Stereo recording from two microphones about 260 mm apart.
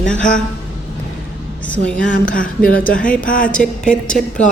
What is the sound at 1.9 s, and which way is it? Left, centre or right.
Speech, left.